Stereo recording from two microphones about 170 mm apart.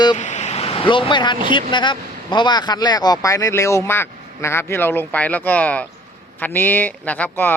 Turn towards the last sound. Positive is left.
turn(degrees=10)  # may be behind; listen again after turning